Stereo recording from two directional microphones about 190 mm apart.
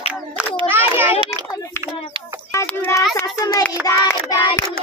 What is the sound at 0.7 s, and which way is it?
Children playing, 10° right (ahead or behind).